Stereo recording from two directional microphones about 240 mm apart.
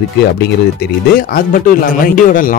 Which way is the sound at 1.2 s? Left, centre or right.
Left.